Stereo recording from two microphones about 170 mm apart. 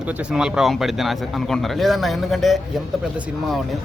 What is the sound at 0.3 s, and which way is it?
Speech, 5° right (ahead or behind).